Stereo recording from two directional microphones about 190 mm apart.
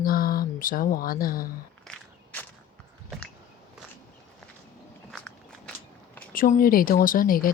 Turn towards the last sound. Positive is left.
turn(degrees=50)  # may be behind; listen again after turning